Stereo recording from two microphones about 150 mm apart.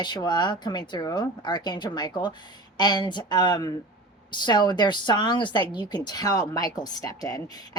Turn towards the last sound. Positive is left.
turn(degrees=25)  # may be behind; listen again after turning